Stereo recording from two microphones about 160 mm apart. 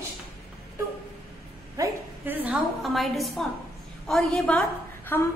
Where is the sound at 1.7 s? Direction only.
15° right (ahead or behind).